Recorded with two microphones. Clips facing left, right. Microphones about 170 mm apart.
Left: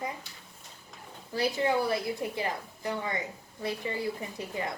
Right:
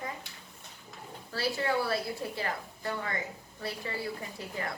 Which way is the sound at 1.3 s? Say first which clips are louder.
Left 3 dB; 20° left (ahead or behind).